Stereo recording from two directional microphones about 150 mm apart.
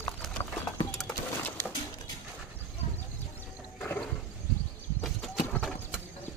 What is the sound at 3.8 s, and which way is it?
Music, 15° left (ahead or behind).